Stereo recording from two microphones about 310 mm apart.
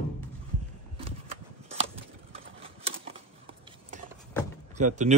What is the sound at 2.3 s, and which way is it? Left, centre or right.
Typewriter, centre.